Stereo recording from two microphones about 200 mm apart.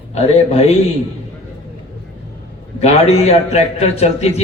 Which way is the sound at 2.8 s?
30° left (ahead or behind).